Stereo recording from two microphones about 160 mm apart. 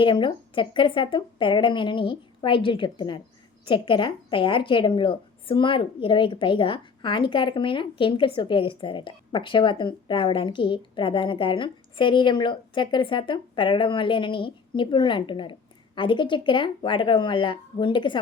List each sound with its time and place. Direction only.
0.0 s a woman's voice: 30° left (ahead or behind)